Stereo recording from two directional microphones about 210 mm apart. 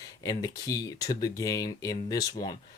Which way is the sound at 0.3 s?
15° left (ahead or behind).